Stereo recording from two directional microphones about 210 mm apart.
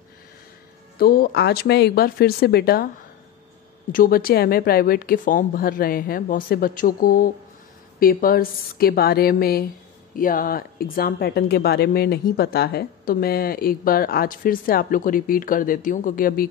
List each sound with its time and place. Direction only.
0.9 s a woman's voice: 45° left (ahead or behind)
3.9 s a woman's voice: 45° left (ahead or behind)